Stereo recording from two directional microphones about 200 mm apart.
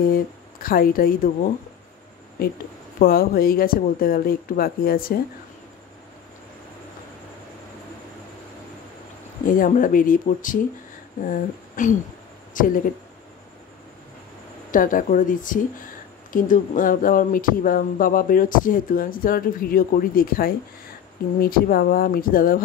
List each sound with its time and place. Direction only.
0.1 s speech: 45° left (ahead or behind)
9.5 s speech: 45° left (ahead or behind)
14.7 s speech: 40° left (ahead or behind)